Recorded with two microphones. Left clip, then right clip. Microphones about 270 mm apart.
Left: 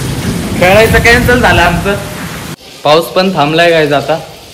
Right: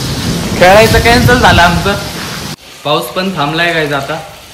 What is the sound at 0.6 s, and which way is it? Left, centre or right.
Speech, right.